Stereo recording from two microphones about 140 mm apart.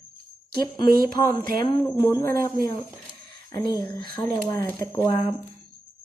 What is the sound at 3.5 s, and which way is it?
Speech, 30° left (ahead or behind).